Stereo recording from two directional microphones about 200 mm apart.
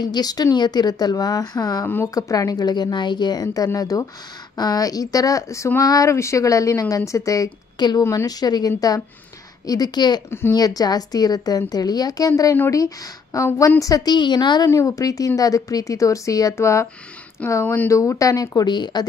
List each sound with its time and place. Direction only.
0.0 s a woman's voice: 20° left (ahead or behind)